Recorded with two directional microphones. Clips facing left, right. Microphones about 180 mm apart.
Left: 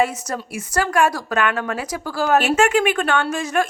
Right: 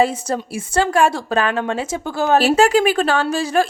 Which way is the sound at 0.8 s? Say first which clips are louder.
Right 3 dB; 30° right (ahead or behind).